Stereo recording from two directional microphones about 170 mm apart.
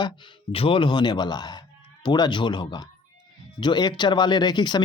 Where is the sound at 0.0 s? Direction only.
30° left (ahead or behind).